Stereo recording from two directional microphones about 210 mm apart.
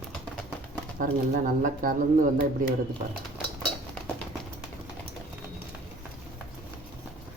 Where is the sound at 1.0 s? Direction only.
40° right (ahead or behind).